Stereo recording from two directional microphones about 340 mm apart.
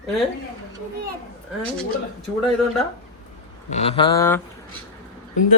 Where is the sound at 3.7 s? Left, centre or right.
Centre.